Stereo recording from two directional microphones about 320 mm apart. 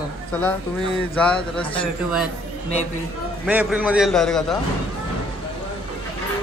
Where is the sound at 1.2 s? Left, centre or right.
Centre.